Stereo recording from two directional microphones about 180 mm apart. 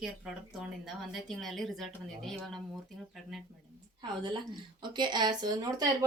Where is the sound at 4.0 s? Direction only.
25° right (ahead or behind).